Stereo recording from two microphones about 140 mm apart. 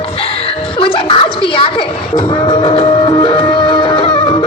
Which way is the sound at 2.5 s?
35° left (ahead or behind).